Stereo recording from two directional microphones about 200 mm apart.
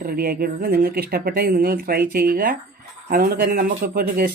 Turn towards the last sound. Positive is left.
turn(degrees=-45)  # may be behind; listen again after turning